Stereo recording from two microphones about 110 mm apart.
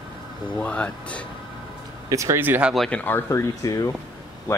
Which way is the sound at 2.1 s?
30° right (ahead or behind).